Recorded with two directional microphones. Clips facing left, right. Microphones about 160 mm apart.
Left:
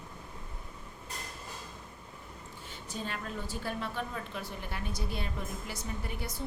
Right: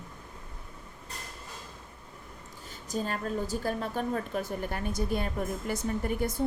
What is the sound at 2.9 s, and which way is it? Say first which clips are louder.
A woman's voice: right 7 dB; 40° right (ahead or behind).